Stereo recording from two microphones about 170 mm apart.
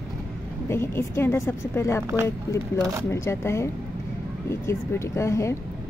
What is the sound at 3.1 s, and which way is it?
Speech, 15° left (ahead or behind).